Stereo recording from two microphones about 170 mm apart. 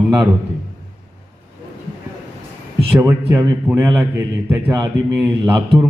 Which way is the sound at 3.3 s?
20° right (ahead or behind).